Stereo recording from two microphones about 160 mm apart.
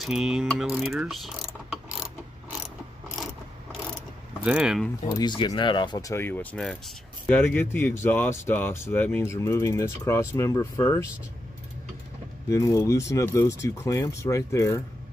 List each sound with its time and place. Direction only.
0.0 s mechanisms: 5° right (ahead or behind)
4.5 s speech: 5° right (ahead or behind)
5.1 s speech: 30° left (ahead or behind)
12.4 s speech: 20° left (ahead or behind)